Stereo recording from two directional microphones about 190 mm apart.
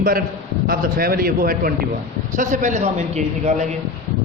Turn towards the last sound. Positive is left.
turn(degrees=-35)  # may be behind; listen again after turning